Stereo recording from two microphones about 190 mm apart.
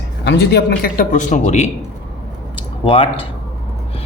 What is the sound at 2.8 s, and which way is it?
Speech, 30° left (ahead or behind).